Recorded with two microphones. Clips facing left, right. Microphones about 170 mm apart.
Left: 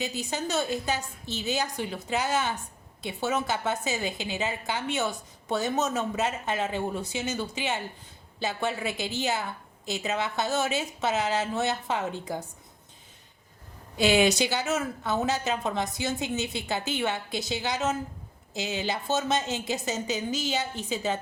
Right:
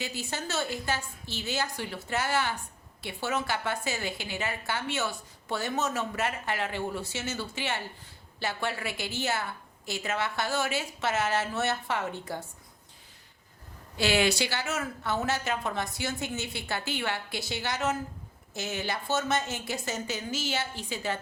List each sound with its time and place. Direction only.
0.0 s a woman's voice: 20° left (ahead or behind)
13.9 s a woman's voice: 20° left (ahead or behind)